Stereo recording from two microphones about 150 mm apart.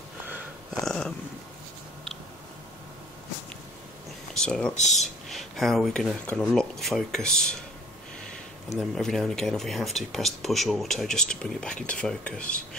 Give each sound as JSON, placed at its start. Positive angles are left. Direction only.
{"t": 0.7, "sound": "a sound", "side_deg": 5}
{"t": 4.3, "sound": "speech", "side_deg": 5}
{"t": 4.7, "sound": "speech", "side_deg": 50}
{"t": 5.3, "sound": "speech", "side_deg": 0}
{"t": 8.7, "sound": "speech", "side_deg": 0}